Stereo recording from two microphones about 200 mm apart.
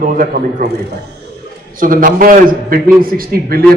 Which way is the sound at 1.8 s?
45° right (ahead or behind).